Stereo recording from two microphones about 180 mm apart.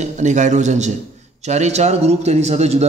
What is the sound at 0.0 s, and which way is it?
A man's voice, 40° right (ahead or behind).